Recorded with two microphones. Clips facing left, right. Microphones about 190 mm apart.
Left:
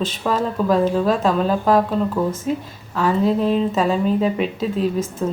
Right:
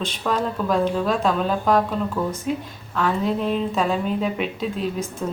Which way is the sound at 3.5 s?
5° left (ahead or behind).